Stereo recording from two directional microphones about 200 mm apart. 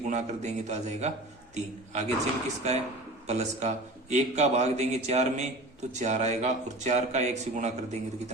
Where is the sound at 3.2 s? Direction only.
35° right (ahead or behind).